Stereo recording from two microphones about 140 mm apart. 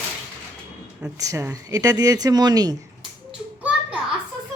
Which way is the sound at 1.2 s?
20° right (ahead or behind).